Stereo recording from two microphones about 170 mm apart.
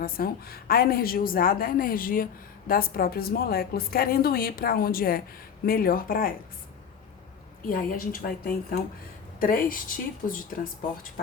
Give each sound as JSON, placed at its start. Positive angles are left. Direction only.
{"t": 0.0, "sound": "a woman's voice", "side_deg": 60}
{"t": 7.6, "sound": "a woman's voice", "side_deg": 60}